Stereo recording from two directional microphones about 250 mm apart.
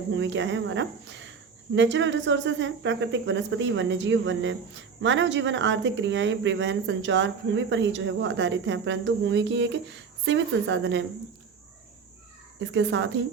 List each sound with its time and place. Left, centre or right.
0.1 s speech: right
12.5 s speech: right